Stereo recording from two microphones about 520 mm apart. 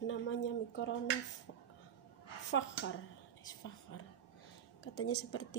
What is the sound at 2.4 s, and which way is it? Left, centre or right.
Speech, left.